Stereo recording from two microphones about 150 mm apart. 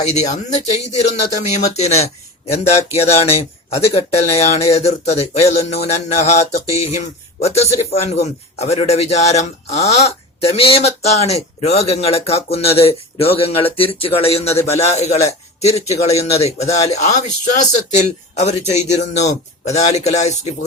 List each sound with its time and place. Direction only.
0.0 s a man's voice: 50° left (ahead or behind)